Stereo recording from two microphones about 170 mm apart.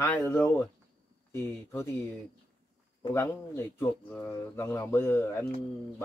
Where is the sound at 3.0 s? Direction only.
15° left (ahead or behind).